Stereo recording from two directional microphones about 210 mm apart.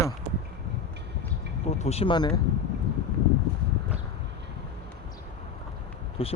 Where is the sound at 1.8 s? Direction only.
30° left (ahead or behind).